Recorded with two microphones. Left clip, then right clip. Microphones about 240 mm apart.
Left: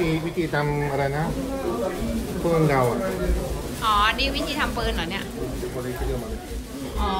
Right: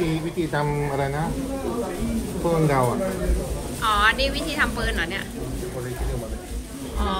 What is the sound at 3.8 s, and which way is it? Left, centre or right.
A woman's voice, centre.